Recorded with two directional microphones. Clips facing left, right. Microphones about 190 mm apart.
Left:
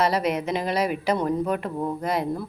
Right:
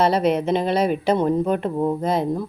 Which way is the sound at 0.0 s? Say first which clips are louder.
Right 5 dB; 30° right (ahead or behind).